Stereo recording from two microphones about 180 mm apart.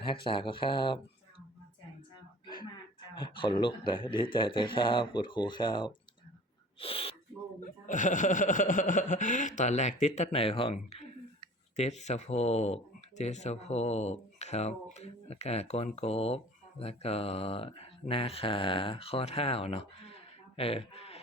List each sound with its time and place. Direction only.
0.0 s speech: 25° left (ahead or behind)
3.2 s speech: 25° left (ahead or behind)
7.6 s speech: 45° left (ahead or behind)